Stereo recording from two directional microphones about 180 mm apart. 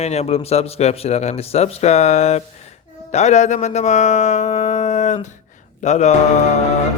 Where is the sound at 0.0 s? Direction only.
35° left (ahead or behind).